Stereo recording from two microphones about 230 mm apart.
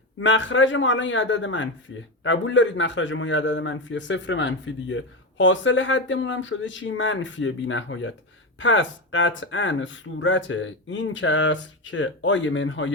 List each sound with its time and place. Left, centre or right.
0.2 s a man's voice: left